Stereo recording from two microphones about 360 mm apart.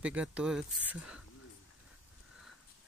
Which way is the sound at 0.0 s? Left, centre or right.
Centre.